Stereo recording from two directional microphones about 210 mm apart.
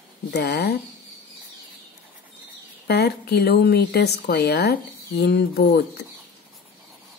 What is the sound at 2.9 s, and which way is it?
Speech, 50° left (ahead or behind).